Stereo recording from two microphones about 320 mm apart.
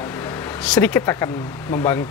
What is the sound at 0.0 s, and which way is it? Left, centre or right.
Speech, centre.